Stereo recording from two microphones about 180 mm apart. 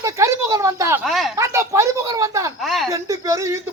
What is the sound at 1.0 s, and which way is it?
Speech, centre (ahead or behind).